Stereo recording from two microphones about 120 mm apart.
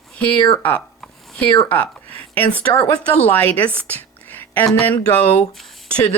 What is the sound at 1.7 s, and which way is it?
Speech, 10° left (ahead or behind).